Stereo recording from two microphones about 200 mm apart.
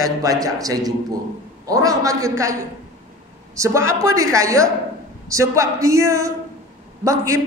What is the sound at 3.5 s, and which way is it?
A man's voice, 15° right (ahead or behind).